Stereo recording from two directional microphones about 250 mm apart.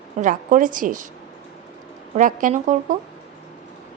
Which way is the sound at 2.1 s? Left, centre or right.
Right.